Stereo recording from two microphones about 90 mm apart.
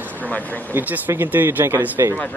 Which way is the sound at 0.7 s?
20° right (ahead or behind).